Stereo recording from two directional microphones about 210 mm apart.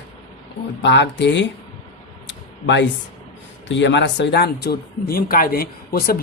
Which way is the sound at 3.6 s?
55° left (ahead or behind).